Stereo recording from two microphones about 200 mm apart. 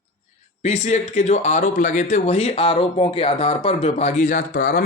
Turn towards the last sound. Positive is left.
turn(degrees=45)  # may be behind; listen again after turning